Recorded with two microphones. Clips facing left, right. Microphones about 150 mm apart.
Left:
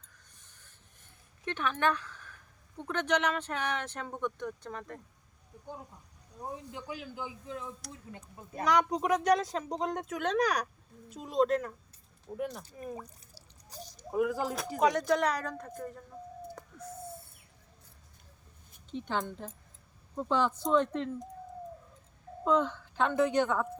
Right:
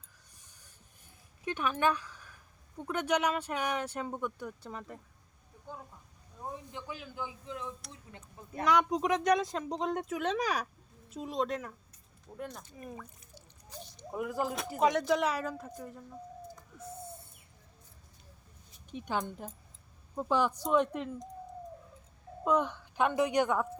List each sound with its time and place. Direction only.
0.3 s a sound: 10° right (ahead or behind)
1.5 s speech: 10° right (ahead or behind)
6.7 s a man's voice: 15° left (ahead or behind)
8.5 s a woman's voice: centre (ahead or behind)
12.6 s drip: 35° left (ahead or behind)
14.5 s a woman's voice: centre (ahead or behind)
18.9 s a woman's voice: 10° right (ahead or behind)
22.4 s a woman's voice: 15° right (ahead or behind)